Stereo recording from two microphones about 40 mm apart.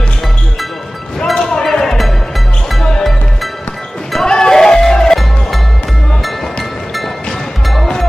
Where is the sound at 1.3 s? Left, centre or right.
Centre.